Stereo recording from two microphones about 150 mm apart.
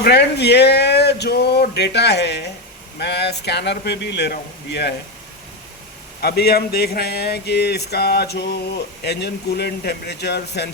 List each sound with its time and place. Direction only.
0.0 s speech: 90° left
6.2 s speech: 90° left